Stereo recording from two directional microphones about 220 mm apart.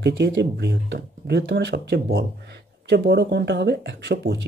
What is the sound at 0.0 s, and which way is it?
Speech, 50° right (ahead or behind).